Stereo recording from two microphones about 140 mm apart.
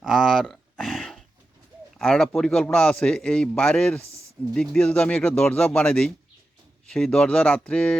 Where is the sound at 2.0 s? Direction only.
5° left (ahead or behind).